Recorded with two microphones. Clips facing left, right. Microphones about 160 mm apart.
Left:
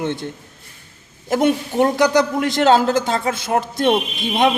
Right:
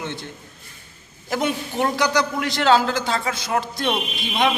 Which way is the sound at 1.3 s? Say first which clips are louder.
Left 7 dB; 45° left (ahead or behind).